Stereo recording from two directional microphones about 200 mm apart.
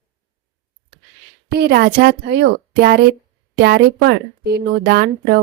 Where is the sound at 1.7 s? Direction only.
55° right (ahead or behind).